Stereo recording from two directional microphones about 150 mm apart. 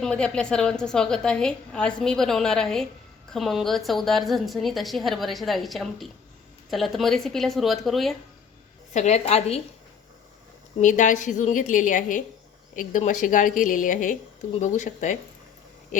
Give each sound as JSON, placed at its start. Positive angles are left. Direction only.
{"t": 0.0, "sound": "a woman's voice", "side_deg": 5}
{"t": 8.9, "sound": "a woman's voice", "side_deg": 50}
{"t": 10.8, "sound": "a woman's voice", "side_deg": 55}